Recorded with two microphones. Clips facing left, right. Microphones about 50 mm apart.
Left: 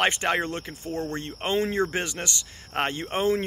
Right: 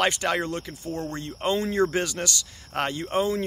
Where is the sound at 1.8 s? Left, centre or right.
Left.